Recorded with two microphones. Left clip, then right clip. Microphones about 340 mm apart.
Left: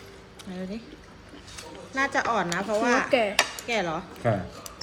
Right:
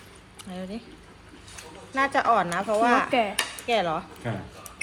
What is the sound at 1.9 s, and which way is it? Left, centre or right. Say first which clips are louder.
Speech: right 3 dB; centre.